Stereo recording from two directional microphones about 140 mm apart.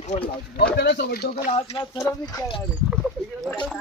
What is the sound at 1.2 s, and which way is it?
Speech, 90° left.